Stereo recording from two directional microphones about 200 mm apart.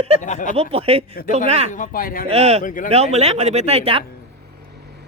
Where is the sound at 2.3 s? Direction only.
30° right (ahead or behind).